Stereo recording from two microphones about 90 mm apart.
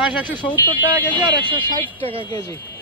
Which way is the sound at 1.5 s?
65° right (ahead or behind).